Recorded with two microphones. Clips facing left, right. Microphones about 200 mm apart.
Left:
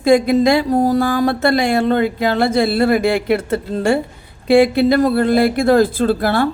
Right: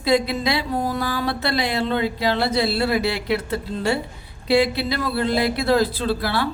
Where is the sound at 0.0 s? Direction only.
50° left (ahead or behind).